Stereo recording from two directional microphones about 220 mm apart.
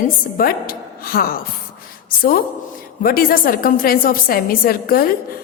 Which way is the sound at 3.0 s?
40° left (ahead or behind).